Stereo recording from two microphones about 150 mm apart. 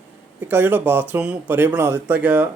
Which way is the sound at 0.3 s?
15° right (ahead or behind).